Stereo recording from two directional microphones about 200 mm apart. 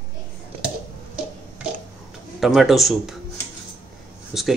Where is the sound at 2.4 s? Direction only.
Centre (ahead or behind).